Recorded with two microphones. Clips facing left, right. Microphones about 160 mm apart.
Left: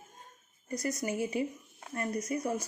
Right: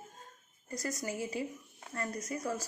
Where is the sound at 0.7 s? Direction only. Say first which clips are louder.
Left 4 dB; 20° left (ahead or behind).